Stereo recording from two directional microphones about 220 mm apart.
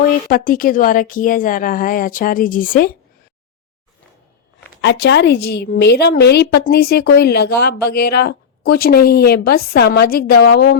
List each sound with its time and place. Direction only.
0.0 s speech: 40° left (ahead or behind)
4.8 s a woman's voice: 50° left (ahead or behind)